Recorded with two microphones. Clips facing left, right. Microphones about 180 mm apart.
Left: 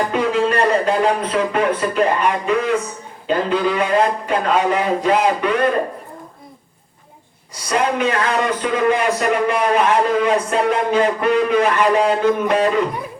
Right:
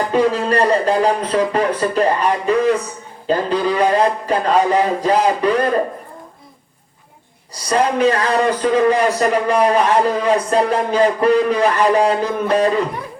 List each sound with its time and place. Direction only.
0.1 s a man's voice: 35° right (ahead or behind)
7.5 s a man's voice: 35° right (ahead or behind)